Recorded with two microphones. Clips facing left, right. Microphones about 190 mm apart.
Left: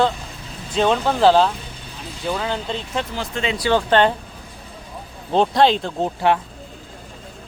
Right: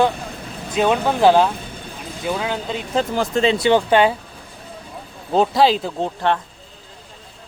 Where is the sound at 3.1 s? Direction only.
45° right (ahead or behind).